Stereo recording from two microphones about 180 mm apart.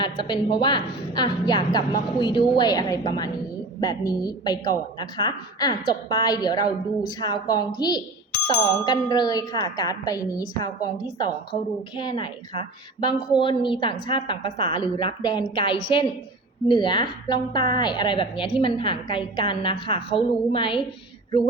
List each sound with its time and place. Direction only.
0.0 s a woman's voice: 25° left (ahead or behind)